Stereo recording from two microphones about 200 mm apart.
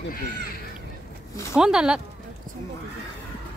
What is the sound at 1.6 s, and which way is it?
Speech, 5° right (ahead or behind).